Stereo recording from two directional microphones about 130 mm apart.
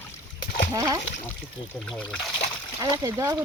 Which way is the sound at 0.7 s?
30° right (ahead or behind).